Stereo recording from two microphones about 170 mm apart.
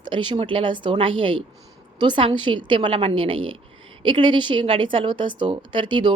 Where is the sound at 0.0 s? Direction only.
25° right (ahead or behind).